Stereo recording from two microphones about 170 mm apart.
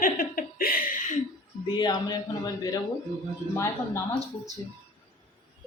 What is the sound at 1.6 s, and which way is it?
A woman's voice, 25° left (ahead or behind).